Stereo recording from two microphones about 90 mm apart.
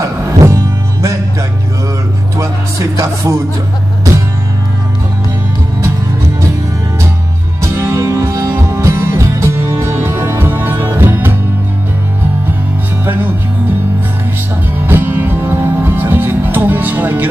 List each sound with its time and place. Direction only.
0.0 s music: 35° right (ahead or behind)
2.3 s music: 35° right (ahead or behind)
7.6 s music: 35° right (ahead or behind)
13.0 s music: 20° right (ahead or behind)
14.9 s music: 25° right (ahead or behind)